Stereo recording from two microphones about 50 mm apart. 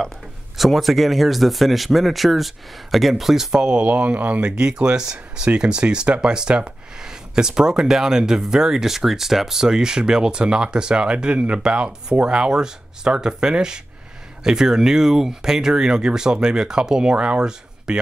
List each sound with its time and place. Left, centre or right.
0.6 s speech: centre
3.8 s speech: right
4.5 s speech: centre